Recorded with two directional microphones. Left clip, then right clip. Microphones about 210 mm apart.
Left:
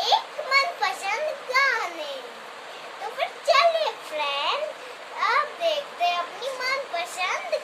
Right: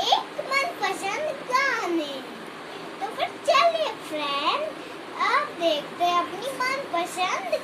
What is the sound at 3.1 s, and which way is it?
Children playing, 15° left (ahead or behind).